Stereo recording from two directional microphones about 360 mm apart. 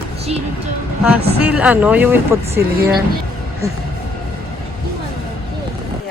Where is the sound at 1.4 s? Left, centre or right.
Centre.